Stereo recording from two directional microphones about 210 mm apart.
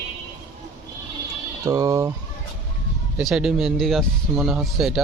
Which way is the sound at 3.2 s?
5° right (ahead or behind).